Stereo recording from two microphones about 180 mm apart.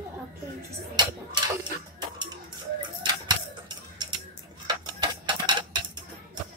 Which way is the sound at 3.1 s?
25° right (ahead or behind).